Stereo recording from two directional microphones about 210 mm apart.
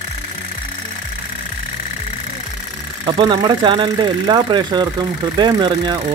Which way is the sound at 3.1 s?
20° right (ahead or behind).